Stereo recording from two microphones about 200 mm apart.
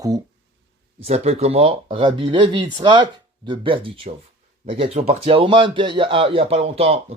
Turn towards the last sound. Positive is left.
turn(degrees=-30)  # may be behind; listen again after turning